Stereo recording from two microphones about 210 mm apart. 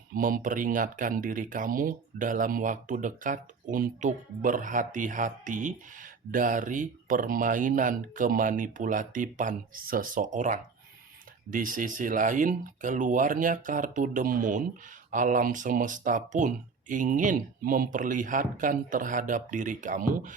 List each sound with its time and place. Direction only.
0.1 s speech: 40° right (ahead or behind)